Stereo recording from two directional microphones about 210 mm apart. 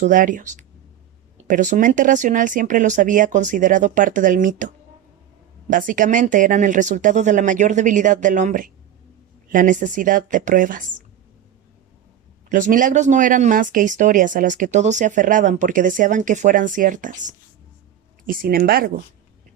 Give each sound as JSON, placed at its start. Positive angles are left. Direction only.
{"t": 0.0, "sound": "speech", "side_deg": -40}
{"t": 12.5, "sound": "speech", "side_deg": -35}